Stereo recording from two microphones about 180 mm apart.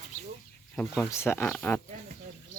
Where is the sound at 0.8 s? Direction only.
10° left (ahead or behind).